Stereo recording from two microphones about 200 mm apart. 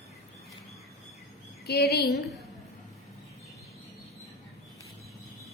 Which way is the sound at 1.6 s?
55° left (ahead or behind).